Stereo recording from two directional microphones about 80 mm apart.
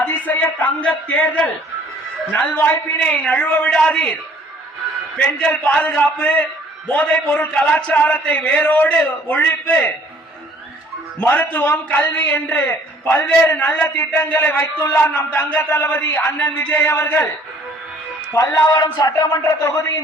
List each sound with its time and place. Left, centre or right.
0.1 s a man's voice: centre
5.1 s a man's voice: centre
11.2 s a man's voice: left
18.3 s a man's voice: left
18.9 s a sound: left